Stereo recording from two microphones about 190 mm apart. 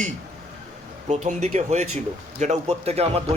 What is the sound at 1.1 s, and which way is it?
A man's voice, 40° right (ahead or behind).